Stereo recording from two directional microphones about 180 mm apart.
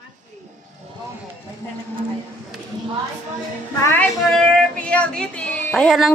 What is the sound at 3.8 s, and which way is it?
A woman's voice, 10° left (ahead or behind).